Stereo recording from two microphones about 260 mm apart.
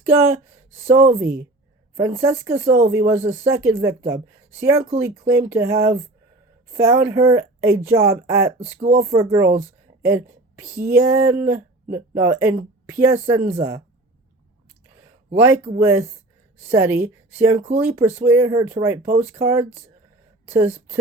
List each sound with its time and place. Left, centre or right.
0.0 s speech: centre
8.5 s speech: right
9.0 s speech: centre
15.4 s speech: centre